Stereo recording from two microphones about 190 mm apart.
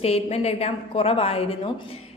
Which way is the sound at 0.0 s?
35° left (ahead or behind).